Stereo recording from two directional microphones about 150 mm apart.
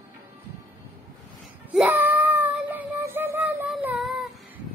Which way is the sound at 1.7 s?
15° right (ahead or behind).